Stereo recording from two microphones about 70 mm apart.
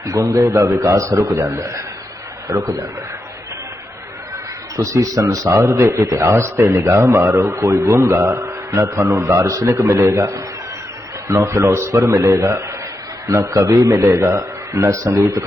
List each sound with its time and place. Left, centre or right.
0.1 s a man's voice: right
4.8 s a man's voice: right